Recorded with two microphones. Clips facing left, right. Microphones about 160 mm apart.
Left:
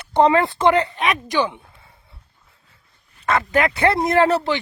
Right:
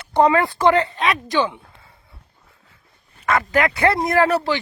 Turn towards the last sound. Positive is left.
turn(degrees=25)  # may be behind; listen again after turning